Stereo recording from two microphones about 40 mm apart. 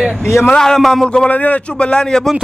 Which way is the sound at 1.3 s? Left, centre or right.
Left.